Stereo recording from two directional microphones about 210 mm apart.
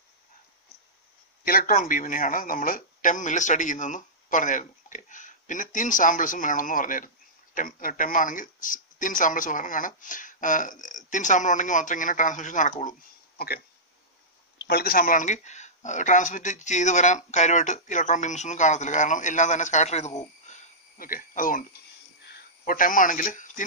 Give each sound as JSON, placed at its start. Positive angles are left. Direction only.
{"t": 1.4, "sound": "speech", "side_deg": 45}
{"t": 14.7, "sound": "speech", "side_deg": 45}
{"t": 20.4, "sound": "a sound", "side_deg": 40}